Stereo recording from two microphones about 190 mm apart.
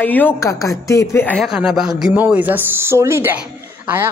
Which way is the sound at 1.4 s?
5° right (ahead or behind).